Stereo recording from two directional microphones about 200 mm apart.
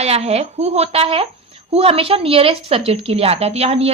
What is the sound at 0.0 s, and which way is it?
A woman's voice, 30° right (ahead or behind).